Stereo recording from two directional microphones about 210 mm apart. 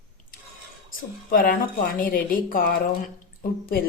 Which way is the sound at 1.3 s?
45° left (ahead or behind).